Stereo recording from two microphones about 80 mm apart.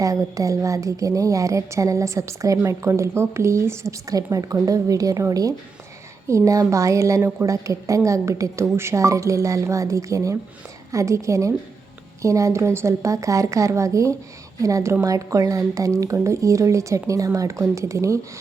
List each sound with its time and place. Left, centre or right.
0.0 s a woman's voice: right
7.2 s speech: right
7.4 s a woman's voice: right